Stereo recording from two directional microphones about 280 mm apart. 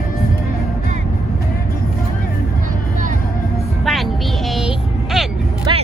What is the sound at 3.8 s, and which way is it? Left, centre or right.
Vehicle, centre.